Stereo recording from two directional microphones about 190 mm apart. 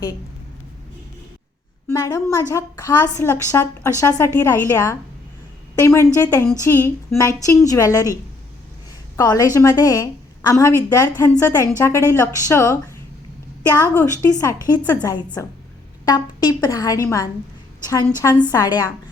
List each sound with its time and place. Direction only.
1.9 s a woman's voice: 20° left (ahead or behind)
9.1 s a woman's voice: 20° left (ahead or behind)